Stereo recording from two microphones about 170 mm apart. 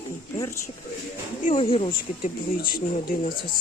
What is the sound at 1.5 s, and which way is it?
Speech, 30° left (ahead or behind).